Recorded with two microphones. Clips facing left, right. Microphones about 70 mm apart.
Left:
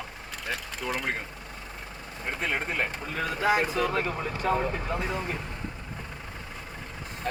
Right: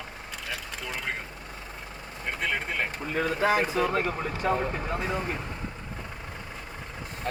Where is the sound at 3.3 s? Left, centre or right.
Right.